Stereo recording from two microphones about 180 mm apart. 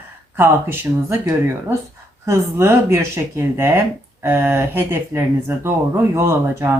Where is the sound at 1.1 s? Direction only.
15° right (ahead or behind).